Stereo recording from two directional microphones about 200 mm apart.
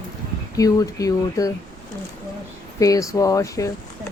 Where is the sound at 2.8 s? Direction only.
15° left (ahead or behind).